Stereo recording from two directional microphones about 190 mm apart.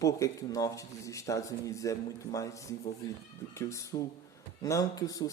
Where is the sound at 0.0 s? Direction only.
15° left (ahead or behind).